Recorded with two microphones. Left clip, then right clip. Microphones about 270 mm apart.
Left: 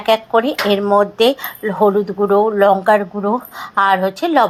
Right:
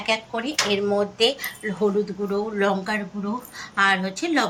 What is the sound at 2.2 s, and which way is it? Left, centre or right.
Speech, left.